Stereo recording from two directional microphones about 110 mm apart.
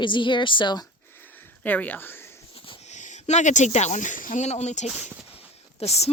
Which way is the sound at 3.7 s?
90° left.